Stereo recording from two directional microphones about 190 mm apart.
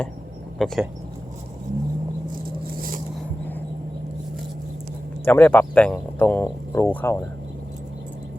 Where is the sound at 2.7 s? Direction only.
50° right (ahead or behind).